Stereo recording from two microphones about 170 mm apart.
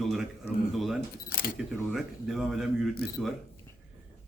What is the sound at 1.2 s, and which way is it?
Speech, 60° left (ahead or behind).